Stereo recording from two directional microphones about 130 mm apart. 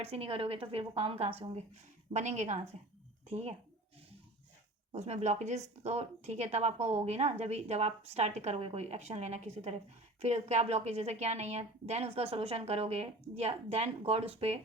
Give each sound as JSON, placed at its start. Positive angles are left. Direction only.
{"t": 0.0, "sound": "a woman's voice", "side_deg": -45}
{"t": 2.1, "sound": "speech", "side_deg": -65}
{"t": 4.9, "sound": "a woman's voice", "side_deg": -55}